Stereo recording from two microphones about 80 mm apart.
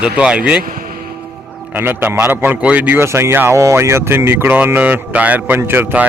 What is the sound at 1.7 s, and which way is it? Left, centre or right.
Speech, right.